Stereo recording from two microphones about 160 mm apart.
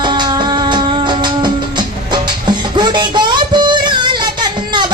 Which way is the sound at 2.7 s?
30° right (ahead or behind).